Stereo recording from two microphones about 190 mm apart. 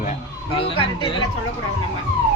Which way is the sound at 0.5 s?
30° left (ahead or behind).